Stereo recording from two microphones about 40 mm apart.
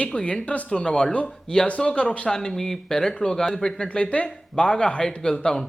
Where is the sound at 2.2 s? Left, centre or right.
Centre.